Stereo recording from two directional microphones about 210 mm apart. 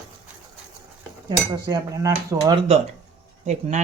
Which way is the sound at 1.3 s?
20° right (ahead or behind).